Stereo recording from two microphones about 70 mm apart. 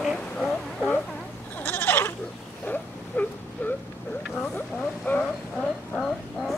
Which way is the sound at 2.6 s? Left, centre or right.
Left.